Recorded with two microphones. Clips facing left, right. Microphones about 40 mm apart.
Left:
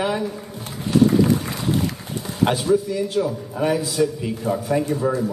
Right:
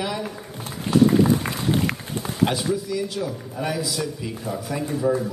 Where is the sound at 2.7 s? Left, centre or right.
Left.